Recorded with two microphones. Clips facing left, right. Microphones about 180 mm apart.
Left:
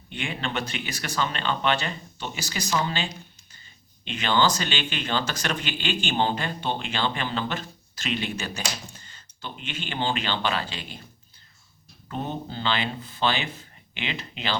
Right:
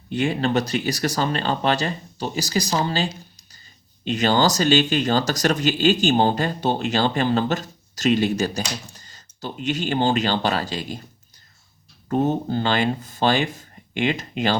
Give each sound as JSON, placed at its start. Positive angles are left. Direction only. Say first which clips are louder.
{"t": 0.1, "sound": "speech", "louder": "right 10 dB", "side_deg": -40}
{"t": 12.0, "sound": "speech", "louder": "right 11 dB", "side_deg": -45}